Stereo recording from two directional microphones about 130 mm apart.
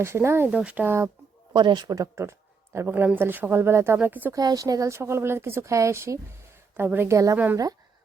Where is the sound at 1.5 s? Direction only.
35° right (ahead or behind); by 4.4 s 15° right (ahead or behind).